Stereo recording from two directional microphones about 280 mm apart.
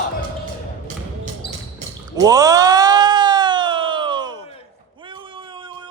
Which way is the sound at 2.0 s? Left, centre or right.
Centre.